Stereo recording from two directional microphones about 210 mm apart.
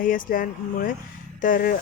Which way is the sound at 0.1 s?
40° left (ahead or behind).